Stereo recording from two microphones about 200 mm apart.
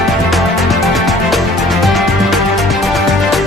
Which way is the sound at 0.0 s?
Centre (ahead or behind).